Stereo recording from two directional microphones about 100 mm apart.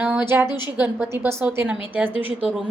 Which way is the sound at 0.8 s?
20° right (ahead or behind).